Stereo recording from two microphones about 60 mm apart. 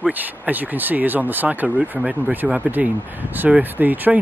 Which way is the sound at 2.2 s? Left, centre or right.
Centre.